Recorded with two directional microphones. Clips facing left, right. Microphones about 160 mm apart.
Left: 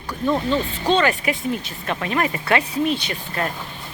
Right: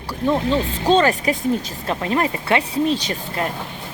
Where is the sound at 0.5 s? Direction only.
40° right (ahead or behind).